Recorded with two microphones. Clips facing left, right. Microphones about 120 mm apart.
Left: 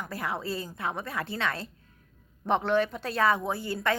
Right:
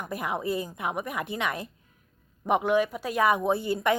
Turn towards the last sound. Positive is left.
turn(degrees=-20)  # may be behind; listen again after turning